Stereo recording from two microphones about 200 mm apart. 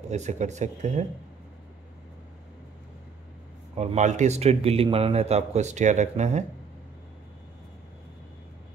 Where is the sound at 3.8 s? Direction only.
35° right (ahead or behind).